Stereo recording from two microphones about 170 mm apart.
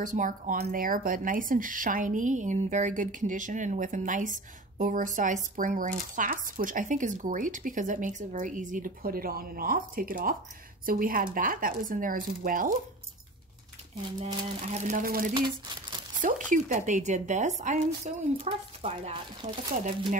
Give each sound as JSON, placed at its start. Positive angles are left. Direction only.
{"t": 0.0, "sound": "speech", "side_deg": -50}
{"t": 14.2, "sound": "speech", "side_deg": -35}
{"t": 15.3, "sound": "crumpling", "side_deg": -25}
{"t": 16.2, "sound": "speech", "side_deg": -50}